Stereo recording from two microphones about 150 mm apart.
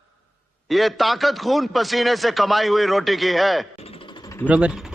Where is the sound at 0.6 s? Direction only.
Centre (ahead or behind).